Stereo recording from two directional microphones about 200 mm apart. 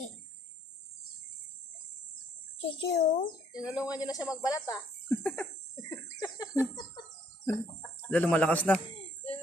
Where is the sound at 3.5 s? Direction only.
20° left (ahead or behind).